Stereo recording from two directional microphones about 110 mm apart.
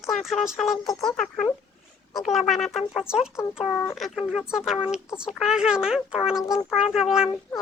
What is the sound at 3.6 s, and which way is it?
Speech, 15° left (ahead or behind).